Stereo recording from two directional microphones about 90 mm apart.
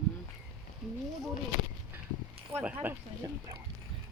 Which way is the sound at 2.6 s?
20° right (ahead or behind).